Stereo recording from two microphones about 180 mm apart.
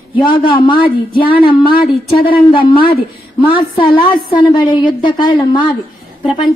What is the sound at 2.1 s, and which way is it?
A woman's voice, 30° left (ahead or behind).